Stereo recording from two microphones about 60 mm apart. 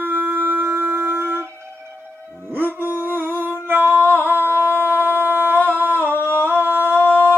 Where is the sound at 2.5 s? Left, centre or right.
Right.